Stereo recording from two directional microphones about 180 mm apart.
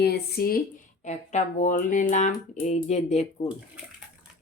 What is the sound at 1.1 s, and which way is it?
Speech, 45° left (ahead or behind).